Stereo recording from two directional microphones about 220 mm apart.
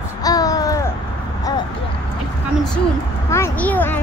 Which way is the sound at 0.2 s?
15° left (ahead or behind).